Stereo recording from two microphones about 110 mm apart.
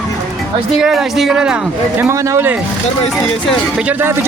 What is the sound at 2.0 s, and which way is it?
Speech, 20° right (ahead or behind).